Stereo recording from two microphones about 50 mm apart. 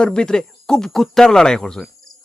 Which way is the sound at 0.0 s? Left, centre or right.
Centre.